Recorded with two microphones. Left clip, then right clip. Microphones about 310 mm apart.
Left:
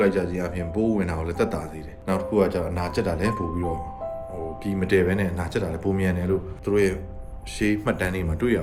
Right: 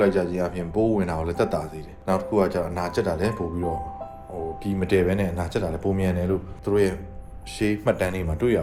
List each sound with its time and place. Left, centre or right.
0.0 s speech: centre